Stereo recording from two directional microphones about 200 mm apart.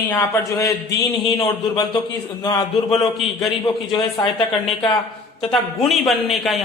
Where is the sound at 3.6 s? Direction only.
20° left (ahead or behind).